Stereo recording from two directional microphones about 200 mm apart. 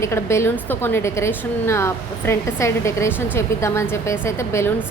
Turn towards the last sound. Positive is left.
turn(degrees=15)  # may be behind; listen again after turning